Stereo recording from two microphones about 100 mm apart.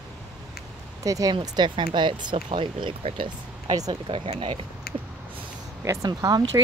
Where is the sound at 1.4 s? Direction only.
50° right (ahead or behind); by 4.6 s 70° right (ahead or behind).